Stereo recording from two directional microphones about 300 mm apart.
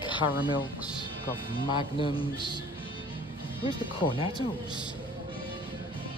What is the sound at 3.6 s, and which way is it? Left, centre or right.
Speech, centre.